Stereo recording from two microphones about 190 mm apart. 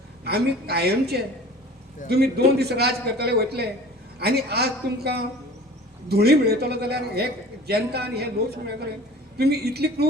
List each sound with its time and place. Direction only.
0.3 s a man's voice: 55° right (ahead or behind)